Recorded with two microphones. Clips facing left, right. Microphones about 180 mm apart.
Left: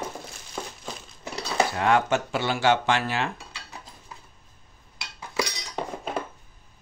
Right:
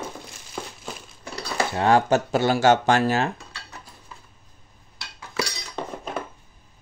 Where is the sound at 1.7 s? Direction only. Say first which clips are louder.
Right 6 dB; 35° right (ahead or behind).